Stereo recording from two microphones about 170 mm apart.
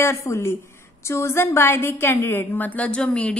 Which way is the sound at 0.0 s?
15° left (ahead or behind).